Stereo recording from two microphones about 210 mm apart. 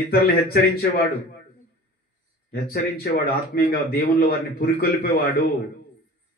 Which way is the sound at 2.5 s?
45° left (ahead or behind).